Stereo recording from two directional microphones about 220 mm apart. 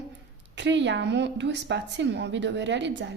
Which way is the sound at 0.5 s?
55° right (ahead or behind).